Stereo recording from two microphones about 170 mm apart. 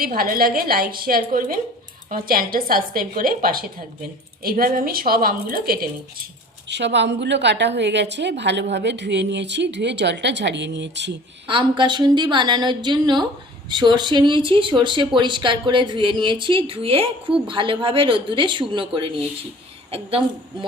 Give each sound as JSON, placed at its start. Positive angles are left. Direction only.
{"t": 0.0, "sound": "a woman's voice", "side_deg": -55}
{"t": 6.7, "sound": "a woman's voice", "side_deg": -90}
{"t": 11.4, "sound": "a woman's voice", "side_deg": -30}